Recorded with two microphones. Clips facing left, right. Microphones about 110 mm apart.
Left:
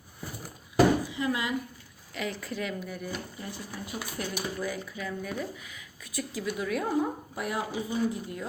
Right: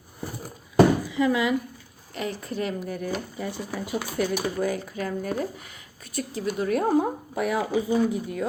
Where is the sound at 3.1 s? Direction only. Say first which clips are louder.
Right 7 dB; 85° right.